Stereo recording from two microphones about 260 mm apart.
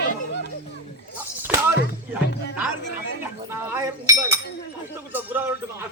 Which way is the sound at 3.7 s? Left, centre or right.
Centre.